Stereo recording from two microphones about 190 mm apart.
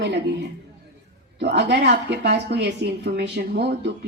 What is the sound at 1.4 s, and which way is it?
Speech, 60° right (ahead or behind).